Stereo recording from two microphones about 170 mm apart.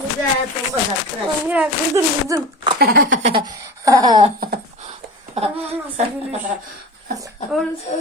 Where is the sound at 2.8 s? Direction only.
70° right (ahead or behind).